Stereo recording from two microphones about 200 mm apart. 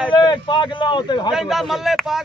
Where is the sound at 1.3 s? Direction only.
Centre (ahead or behind).